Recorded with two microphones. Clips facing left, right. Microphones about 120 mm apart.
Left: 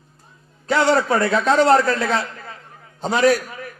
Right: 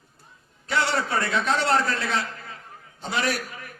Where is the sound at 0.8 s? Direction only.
40° left (ahead or behind).